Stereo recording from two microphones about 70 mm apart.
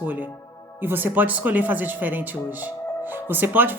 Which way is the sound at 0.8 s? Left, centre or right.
Right.